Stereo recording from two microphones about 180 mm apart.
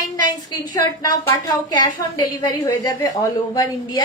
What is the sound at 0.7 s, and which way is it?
A woman's voice, 20° left (ahead or behind).